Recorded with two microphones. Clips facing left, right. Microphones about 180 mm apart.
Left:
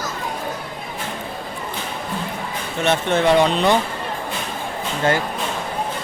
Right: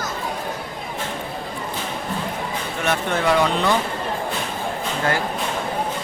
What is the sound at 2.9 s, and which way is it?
Speech, 25° left (ahead or behind).